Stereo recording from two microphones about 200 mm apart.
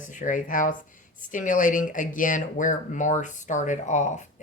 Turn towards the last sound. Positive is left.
turn(degrees=35)  # may be behind; listen again after turning